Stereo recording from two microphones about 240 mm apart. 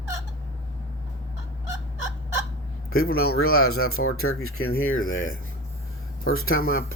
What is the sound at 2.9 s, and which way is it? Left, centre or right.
Speech, left.